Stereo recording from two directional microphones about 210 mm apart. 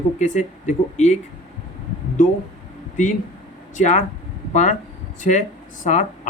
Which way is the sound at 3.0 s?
35° left (ahead or behind).